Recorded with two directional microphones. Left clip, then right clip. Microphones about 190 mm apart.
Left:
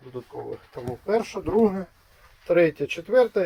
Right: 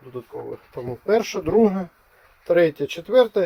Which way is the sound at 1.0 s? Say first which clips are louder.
Right 4 dB; 20° right (ahead or behind).